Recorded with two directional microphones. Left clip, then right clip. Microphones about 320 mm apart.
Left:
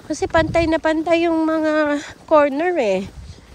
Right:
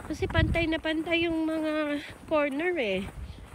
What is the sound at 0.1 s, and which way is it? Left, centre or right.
Speech, centre.